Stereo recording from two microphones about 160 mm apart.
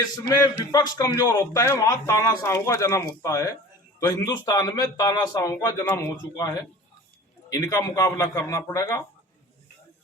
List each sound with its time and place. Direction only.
0.3 s a man's voice: 25° left (ahead or behind)